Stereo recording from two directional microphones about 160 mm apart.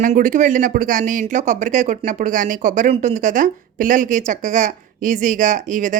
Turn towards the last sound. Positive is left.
turn(degrees=-50)  # may be behind; listen again after turning